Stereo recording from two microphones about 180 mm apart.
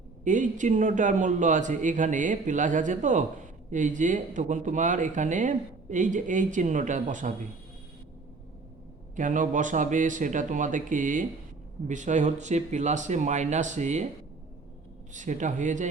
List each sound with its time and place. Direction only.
0.3 s speech: 45° right (ahead or behind)
9.1 s speech: 45° right (ahead or behind)
15.1 s speech: 45° right (ahead or behind)